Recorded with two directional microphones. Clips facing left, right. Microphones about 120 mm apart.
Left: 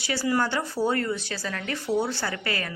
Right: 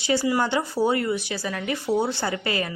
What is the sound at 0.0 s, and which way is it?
A woman's voice, 20° right (ahead or behind).